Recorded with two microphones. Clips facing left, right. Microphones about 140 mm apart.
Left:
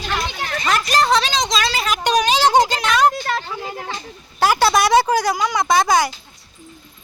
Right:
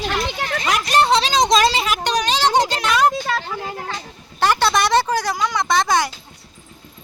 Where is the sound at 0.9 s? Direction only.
25° right (ahead or behind).